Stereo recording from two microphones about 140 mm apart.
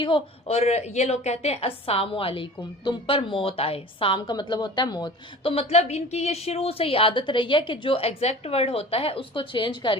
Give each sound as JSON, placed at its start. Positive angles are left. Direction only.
{"t": 0.4, "sound": "a woman's voice", "side_deg": 50}